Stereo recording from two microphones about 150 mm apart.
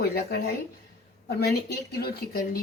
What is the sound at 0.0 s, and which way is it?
Speech, 90° left.